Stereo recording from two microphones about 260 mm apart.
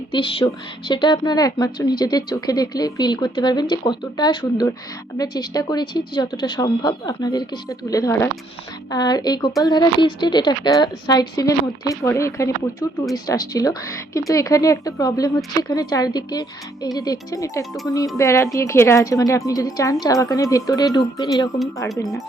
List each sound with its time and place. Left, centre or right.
0.1 s a woman's voice: centre